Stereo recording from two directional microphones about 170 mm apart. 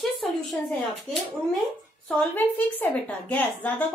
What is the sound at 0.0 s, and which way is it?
Speech, centre (ahead or behind).